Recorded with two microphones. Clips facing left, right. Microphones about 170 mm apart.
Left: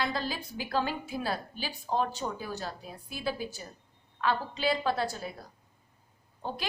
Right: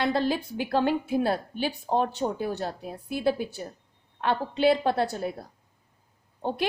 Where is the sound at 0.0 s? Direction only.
60° right (ahead or behind).